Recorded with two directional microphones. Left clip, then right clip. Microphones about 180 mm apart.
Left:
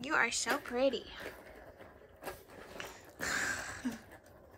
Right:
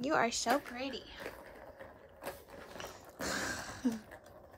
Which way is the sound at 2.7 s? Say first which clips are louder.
Even; 25° right (ahead or behind).